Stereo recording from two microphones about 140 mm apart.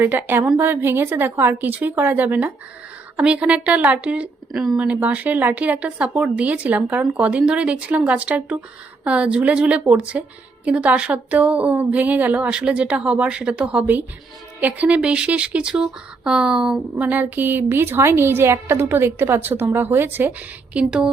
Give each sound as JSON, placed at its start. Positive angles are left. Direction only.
{"t": 0.0, "sound": "a woman's voice", "side_deg": -15}